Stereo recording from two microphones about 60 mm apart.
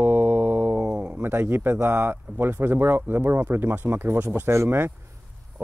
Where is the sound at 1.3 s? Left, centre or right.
Right.